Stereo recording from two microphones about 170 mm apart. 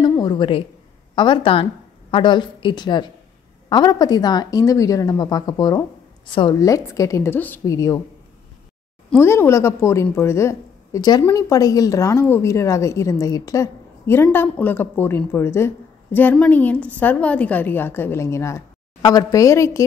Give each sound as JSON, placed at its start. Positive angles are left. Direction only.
{"t": 0.1, "sound": "a woman's voice", "side_deg": 25}
{"t": 9.2, "sound": "a woman's voice", "side_deg": 15}